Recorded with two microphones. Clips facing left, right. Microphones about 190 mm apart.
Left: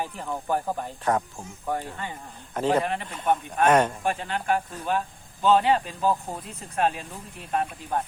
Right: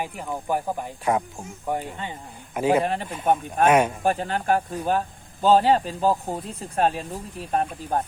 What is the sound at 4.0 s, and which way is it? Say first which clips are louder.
Speech: right 4 dB; 40° right (ahead or behind).